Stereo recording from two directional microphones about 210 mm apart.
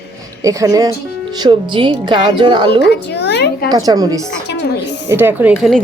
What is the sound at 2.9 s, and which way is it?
Speech, 55° left (ahead or behind).